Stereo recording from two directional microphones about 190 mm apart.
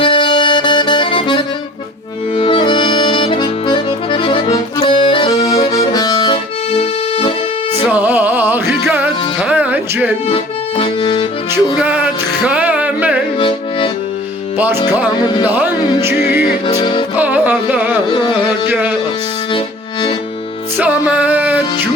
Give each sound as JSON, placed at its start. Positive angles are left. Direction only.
{"t": 0.0, "sound": "music", "side_deg": 25}
{"t": 7.8, "sound": "music", "side_deg": -10}
{"t": 10.2, "sound": "accordion", "side_deg": 30}
{"t": 11.8, "sound": "music", "side_deg": -10}
{"t": 13.4, "sound": "accordion", "side_deg": 25}
{"t": 14.8, "sound": "music", "side_deg": -10}
{"t": 15.2, "sound": "speech", "side_deg": 20}
{"t": 15.4, "sound": "music", "side_deg": -10}
{"t": 16.6, "sound": "music", "side_deg": 25}
{"t": 17.2, "sound": "carnatic music", "side_deg": -10}
{"t": 18.1, "sound": "carnatic music", "side_deg": 25}
{"t": 18.7, "sound": "speech", "side_deg": -10}
{"t": 19.5, "sound": "music", "side_deg": 25}
{"t": 20.7, "sound": "music", "side_deg": -10}